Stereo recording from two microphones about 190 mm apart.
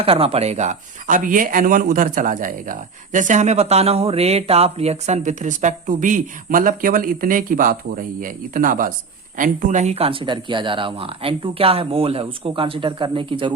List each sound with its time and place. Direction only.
0.0 s speech: 30° right (ahead or behind)